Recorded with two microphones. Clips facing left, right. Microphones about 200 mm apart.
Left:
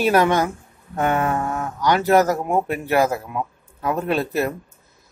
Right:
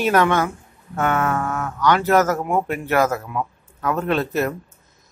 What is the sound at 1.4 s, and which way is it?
Speech, 15° left (ahead or behind).